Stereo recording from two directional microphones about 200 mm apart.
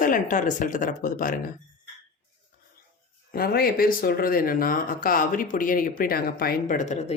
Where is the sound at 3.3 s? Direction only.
50° left (ahead or behind).